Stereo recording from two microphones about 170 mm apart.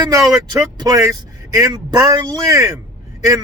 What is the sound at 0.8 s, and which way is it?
Speech, 20° right (ahead or behind).